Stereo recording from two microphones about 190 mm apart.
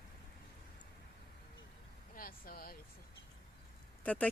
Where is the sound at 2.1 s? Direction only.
50° left (ahead or behind).